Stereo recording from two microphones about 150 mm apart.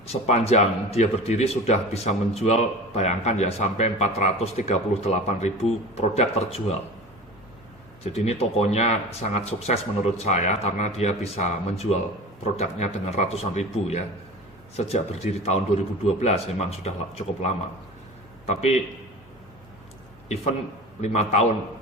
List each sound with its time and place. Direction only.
0.1 s a man's voice: 45° left (ahead or behind)
8.0 s a man's voice: 45° left (ahead or behind)
20.2 s a man's voice: 45° left (ahead or behind)